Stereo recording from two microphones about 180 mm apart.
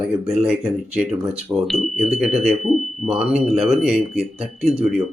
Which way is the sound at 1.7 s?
Centre (ahead or behind).